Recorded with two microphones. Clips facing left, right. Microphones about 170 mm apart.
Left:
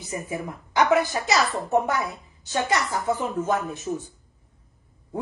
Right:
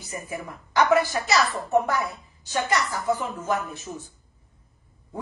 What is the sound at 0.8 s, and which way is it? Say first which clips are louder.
A woman's voice: even; 20° left (ahead or behind).